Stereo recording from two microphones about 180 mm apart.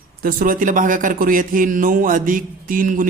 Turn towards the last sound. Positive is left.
turn(degrees=-50)  # may be behind; listen again after turning